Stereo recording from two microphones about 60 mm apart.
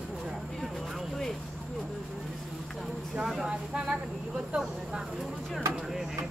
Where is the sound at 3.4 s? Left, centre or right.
Centre.